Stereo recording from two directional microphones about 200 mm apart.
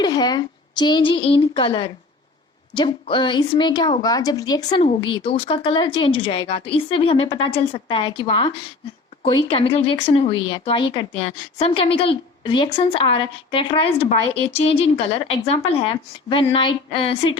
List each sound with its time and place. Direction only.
0.0 s speech: 20° left (ahead or behind)